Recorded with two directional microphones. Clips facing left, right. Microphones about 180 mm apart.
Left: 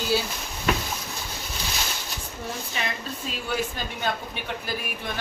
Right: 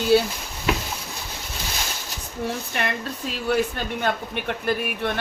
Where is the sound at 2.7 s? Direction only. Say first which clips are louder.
Right 4 dB; 65° right (ahead or behind).